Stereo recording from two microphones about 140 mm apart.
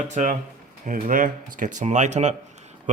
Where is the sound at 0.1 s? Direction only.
60° right (ahead or behind).